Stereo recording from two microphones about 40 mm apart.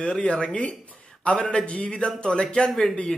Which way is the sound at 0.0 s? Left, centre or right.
Left.